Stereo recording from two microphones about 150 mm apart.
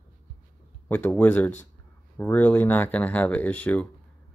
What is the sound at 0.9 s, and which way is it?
Speech, 10° left (ahead or behind).